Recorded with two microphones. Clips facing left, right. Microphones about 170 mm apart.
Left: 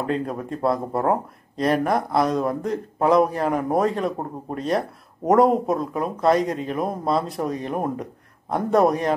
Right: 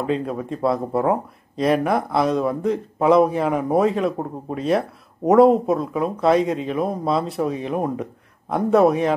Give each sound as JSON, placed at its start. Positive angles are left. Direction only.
{"t": 0.0, "sound": "speech", "side_deg": 0}